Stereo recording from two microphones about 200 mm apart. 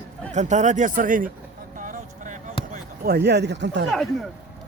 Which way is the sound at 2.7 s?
50° right (ahead or behind).